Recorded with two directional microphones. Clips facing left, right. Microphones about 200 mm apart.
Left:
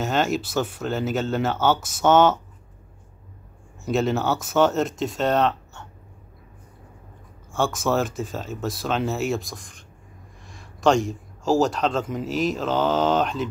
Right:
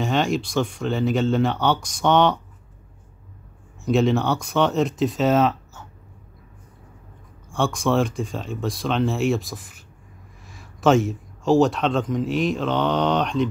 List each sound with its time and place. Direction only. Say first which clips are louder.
0.0 s speech: right 1 dB; centre (ahead or behind)
3.8 s speech: right 3 dB; centre (ahead or behind)
7.5 s a man's voice: right 2 dB; centre (ahead or behind)